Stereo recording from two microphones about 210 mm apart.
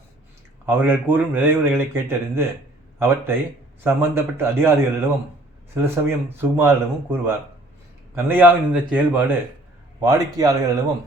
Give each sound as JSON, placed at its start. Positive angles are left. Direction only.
{"t": 0.6, "sound": "a man's voice", "side_deg": -10}